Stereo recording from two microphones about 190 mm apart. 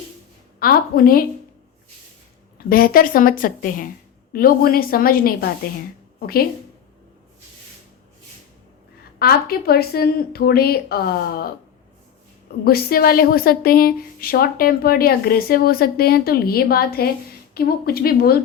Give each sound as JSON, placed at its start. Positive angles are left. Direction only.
{"t": 0.6, "sound": "a woman's voice", "side_deg": 50}
{"t": 2.6, "sound": "a woman's voice", "side_deg": 50}
{"t": 9.1, "sound": "a woman's voice", "side_deg": 55}
{"t": 12.6, "sound": "a woman's voice", "side_deg": 50}